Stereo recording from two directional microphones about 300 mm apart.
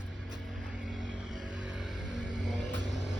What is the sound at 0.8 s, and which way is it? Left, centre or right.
Vehicle, centre.